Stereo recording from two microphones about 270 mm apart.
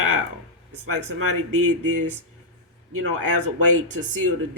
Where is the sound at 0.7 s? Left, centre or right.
Right.